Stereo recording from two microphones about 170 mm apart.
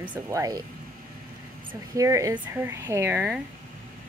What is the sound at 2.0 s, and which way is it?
A woman's voice, 20° right (ahead or behind).